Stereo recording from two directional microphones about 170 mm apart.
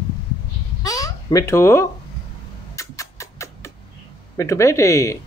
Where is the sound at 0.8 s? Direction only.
20° left (ahead or behind).